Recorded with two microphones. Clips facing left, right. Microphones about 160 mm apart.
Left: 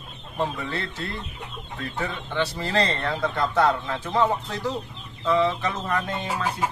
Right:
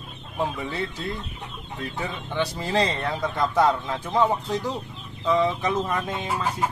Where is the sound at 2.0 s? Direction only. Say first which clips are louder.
Left 1 dB; 15° right (ahead or behind).